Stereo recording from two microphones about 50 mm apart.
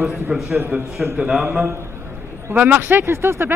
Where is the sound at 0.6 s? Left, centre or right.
Right.